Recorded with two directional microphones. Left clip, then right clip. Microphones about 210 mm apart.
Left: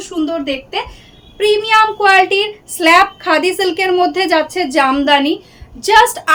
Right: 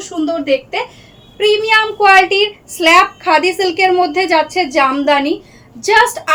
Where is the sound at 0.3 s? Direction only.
15° left (ahead or behind).